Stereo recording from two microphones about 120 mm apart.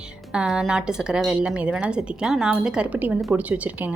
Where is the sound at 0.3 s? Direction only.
5° right (ahead or behind).